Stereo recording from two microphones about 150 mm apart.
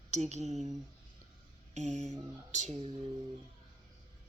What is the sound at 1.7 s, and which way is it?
Speech, 50° right (ahead or behind).